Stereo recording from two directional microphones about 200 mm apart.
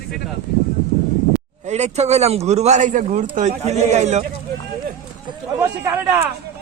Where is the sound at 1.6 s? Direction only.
35° right (ahead or behind).